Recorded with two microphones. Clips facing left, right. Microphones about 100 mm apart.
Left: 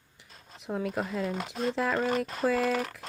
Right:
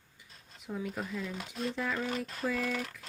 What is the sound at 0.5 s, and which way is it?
Speech, 75° left (ahead or behind).